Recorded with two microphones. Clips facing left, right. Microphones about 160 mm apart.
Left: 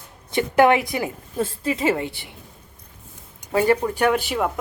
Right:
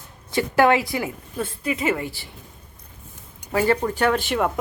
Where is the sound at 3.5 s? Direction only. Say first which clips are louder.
Left 2 dB; 20° left (ahead or behind).